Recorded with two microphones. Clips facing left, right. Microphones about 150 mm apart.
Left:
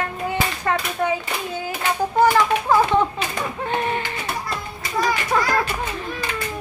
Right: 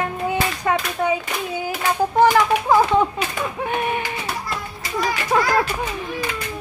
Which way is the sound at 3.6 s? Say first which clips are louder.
Even; 10° right (ahead or behind).